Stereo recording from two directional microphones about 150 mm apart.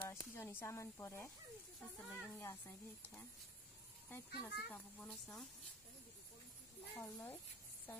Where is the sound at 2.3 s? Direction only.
15° left (ahead or behind).